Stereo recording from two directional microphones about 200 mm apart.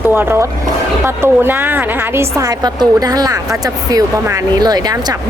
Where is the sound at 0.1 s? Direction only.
10° right (ahead or behind).